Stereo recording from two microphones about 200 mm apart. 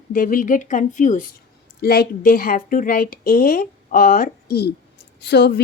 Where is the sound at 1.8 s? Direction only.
50° left (ahead or behind).